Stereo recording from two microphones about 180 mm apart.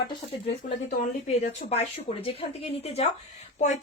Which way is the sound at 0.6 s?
40° left (ahead or behind).